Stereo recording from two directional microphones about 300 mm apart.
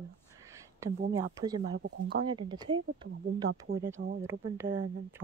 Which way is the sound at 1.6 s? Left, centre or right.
Right.